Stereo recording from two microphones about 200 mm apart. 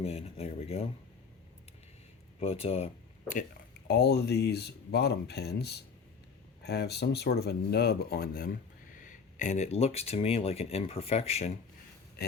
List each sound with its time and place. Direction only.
0.0 s speech: 30° left (ahead or behind)
2.4 s speech: 30° left (ahead or behind)
3.8 s speech: 55° left (ahead or behind); by 11.5 s 30° left (ahead or behind)